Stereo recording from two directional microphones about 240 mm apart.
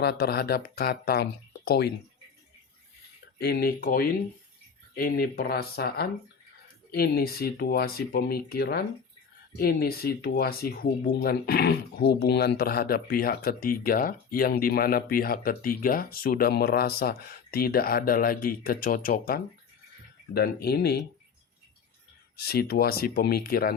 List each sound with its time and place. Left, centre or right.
0.0 s speech: left
3.3 s speech: left
22.4 s speech: left